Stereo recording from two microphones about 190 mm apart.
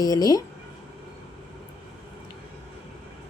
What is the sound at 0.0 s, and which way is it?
Speech, 20° left (ahead or behind).